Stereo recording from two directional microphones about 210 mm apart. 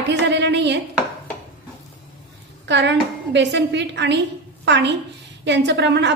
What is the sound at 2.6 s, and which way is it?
A woman's voice, 55° right (ahead or behind).